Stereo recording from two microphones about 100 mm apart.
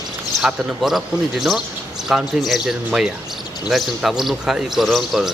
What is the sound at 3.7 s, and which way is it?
A man's voice, 5° right (ahead or behind).